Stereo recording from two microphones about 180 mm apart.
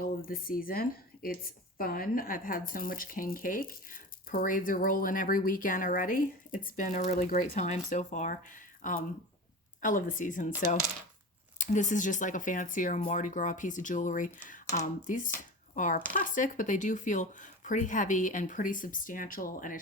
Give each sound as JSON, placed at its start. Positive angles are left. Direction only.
{"t": 0.3, "sound": "a woman's voice", "side_deg": 50}
{"t": 11.5, "sound": "a woman's voice", "side_deg": 45}